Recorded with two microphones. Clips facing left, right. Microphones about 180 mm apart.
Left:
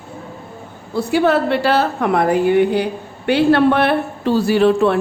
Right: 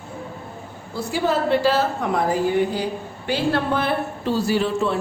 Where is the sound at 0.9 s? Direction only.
65° left (ahead or behind).